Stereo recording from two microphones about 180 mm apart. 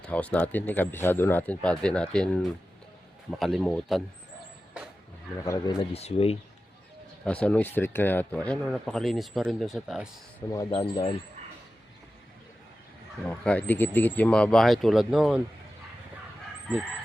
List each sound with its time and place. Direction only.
0.0 s a man's voice: 5° left (ahead or behind)
5.5 s speech: 20° left (ahead or behind)
5.9 s speech: 35° left (ahead or behind)
7.3 s a man's voice: 5° left (ahead or behind)
10.5 s speech: 25° left (ahead or behind)
13.2 s a man's voice: 5° left (ahead or behind)